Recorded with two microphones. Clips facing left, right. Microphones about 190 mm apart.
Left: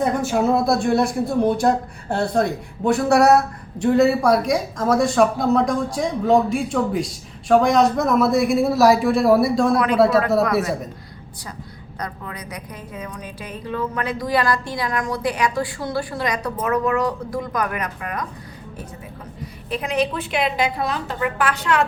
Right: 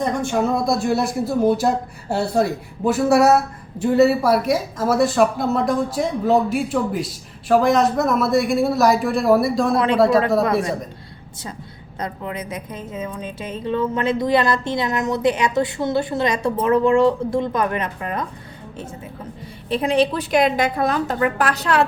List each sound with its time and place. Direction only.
0.0 s speech: 5° left (ahead or behind)
9.7 s a woman's voice: 25° right (ahead or behind)
11.9 s a woman's voice: 25° right (ahead or behind)
19.7 s a woman's voice: 30° right (ahead or behind)